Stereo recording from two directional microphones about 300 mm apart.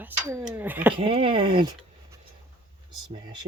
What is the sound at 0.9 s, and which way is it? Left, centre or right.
Speech, centre.